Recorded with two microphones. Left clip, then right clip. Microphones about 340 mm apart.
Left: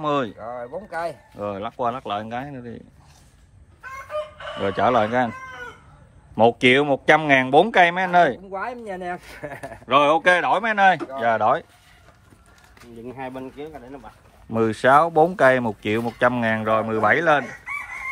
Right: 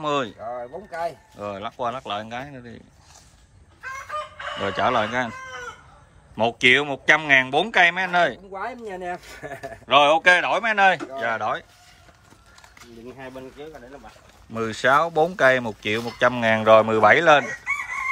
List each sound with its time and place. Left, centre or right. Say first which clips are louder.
0.0 s speech: left 1 dB; centre
0.8 s speech: right 1 dB; centre
4.6 s speech: left 3 dB; centre
6.3 s speech: left 2 dB; centre
14.5 s speech: left 3 dB; centre